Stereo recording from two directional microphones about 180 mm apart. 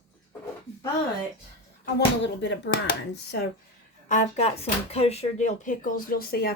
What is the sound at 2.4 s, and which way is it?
Speech, 65° left (ahead or behind).